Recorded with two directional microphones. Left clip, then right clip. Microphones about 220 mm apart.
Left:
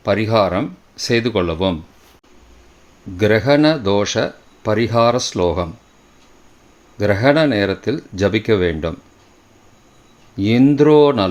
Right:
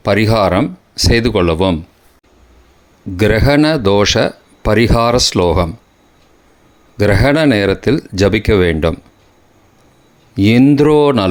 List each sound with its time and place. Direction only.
0.0 s speech: 30° right (ahead or behind)
3.2 s speech: 30° right (ahead or behind)
6.9 s speech: 30° right (ahead or behind)
10.3 s speech: 30° right (ahead or behind)